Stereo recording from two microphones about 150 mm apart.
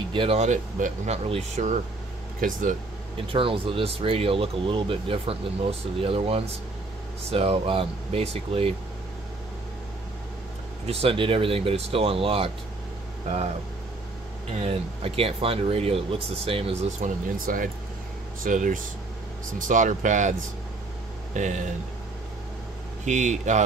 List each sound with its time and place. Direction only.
0.1 s speech: 35° right (ahead or behind)
0.4 s speech: 55° right (ahead or behind)
2.4 s speech: 60° right (ahead or behind)
3.3 s speech: 35° right (ahead or behind)
10.9 s speech: 40° right (ahead or behind)
14.6 s speech: 40° right (ahead or behind)
17.0 s speech: 65° right (ahead or behind)
23.0 s speech: 55° right (ahead or behind)